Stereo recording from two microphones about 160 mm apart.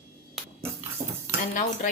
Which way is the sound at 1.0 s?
60° right (ahead or behind).